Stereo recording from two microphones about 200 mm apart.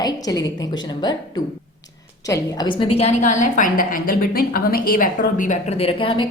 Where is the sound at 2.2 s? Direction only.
20° left (ahead or behind).